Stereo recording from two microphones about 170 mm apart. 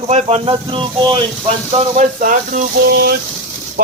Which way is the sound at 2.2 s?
55° right (ahead or behind).